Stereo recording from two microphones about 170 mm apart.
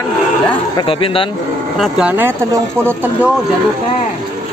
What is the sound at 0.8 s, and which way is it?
Speech, 30° left (ahead or behind).